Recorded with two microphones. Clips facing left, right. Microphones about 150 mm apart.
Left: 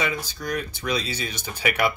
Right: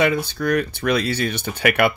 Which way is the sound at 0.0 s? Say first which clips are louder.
Right 9 dB; 60° right (ahead or behind).